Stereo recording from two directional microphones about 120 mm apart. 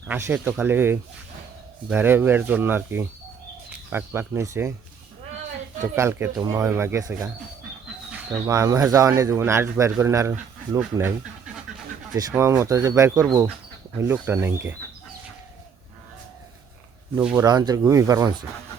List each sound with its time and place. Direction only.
0.1 s a man's voice: 15° right (ahead or behind)
5.8 s a man's voice: 25° right (ahead or behind)
8.1 s bird: 10° right (ahead or behind)
8.4 s a man's voice: 25° right (ahead or behind)
12.4 s a man's voice: 25° right (ahead or behind)
17.2 s speech: 15° right (ahead or behind)
17.4 s speech: 35° right (ahead or behind)